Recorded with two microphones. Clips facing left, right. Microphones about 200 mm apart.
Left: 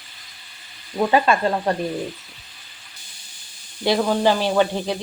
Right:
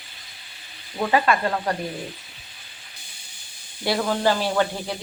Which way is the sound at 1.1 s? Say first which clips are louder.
Left 2 dB; 25° left (ahead or behind).